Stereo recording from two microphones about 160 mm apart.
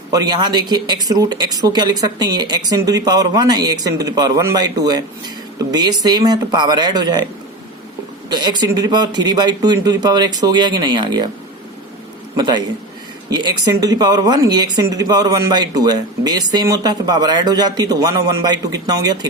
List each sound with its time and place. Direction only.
0.1 s speech: 25° right (ahead or behind)
8.3 s speech: 25° right (ahead or behind)
12.4 s speech: 25° right (ahead or behind)